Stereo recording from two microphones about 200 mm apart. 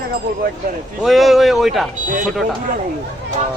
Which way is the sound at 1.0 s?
Centre (ahead or behind).